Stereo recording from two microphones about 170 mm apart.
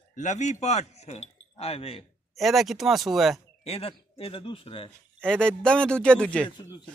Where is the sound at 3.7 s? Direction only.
35° left (ahead or behind).